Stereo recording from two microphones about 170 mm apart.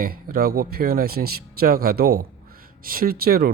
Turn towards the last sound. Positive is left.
turn(degrees=-65)  # may be behind; listen again after turning